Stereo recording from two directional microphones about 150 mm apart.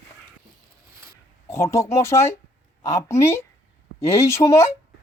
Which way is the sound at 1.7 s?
20° left (ahead or behind).